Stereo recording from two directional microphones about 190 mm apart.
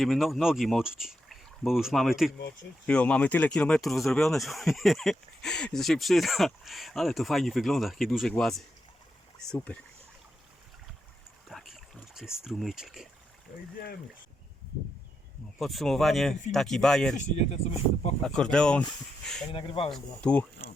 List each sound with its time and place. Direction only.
0.0 s speech: centre (ahead or behind)
11.4 s boat: centre (ahead or behind)
15.5 s speech: centre (ahead or behind)
17.2 s speech: 40° left (ahead or behind)
18.2 s speech: 5° left (ahead or behind)
19.5 s speech: 30° left (ahead or behind)
19.9 s speech: 5° left (ahead or behind)